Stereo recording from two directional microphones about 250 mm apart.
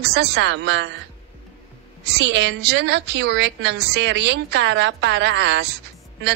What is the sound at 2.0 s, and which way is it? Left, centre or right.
A woman's voice, right.